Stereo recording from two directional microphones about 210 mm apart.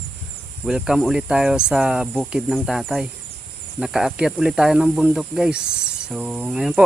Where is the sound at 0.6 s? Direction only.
5° right (ahead or behind).